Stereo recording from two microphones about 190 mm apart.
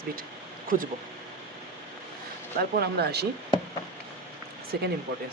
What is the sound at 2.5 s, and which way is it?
Speech, 55° right (ahead or behind).